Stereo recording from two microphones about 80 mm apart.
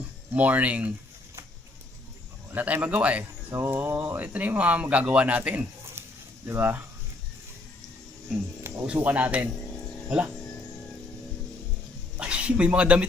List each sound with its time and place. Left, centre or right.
0.3 s speech: centre
2.5 s a man's voice: right
3.5 s speech: right
8.7 s music: right
9.0 s speech: right
12.2 s speech: centre